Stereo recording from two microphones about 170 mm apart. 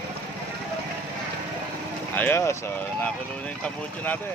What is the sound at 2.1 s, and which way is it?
Vehicle, 10° left (ahead or behind).